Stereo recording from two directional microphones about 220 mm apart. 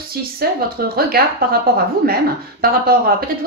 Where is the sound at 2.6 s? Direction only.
45° right (ahead or behind).